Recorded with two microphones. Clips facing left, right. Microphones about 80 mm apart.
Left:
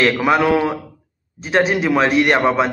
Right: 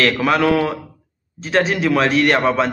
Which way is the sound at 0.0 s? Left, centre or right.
Centre.